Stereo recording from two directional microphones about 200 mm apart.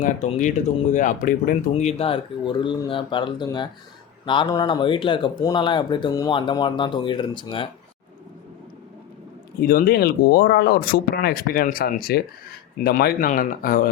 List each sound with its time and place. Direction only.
0.0 s speech: 40° left (ahead or behind)
9.6 s speech: 45° left (ahead or behind)